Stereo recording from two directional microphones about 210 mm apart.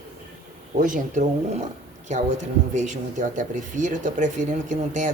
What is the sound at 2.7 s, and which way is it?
Speech, 35° right (ahead or behind).